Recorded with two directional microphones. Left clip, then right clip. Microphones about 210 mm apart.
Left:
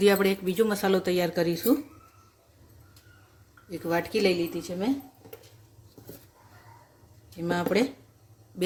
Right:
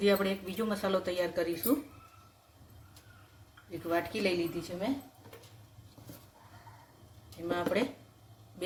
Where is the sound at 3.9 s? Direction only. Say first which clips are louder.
Left 6 dB; 55° left (ahead or behind).